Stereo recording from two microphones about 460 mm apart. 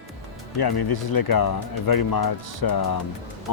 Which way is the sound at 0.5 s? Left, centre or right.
Left.